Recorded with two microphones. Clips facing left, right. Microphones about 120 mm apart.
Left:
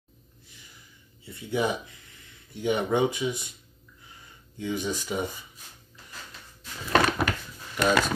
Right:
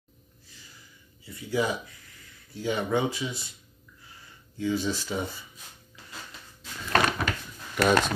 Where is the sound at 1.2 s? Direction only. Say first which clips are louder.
Even; 25° left (ahead or behind).